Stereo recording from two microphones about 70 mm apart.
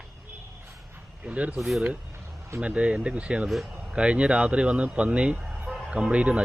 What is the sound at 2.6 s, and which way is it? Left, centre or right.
Speech, centre.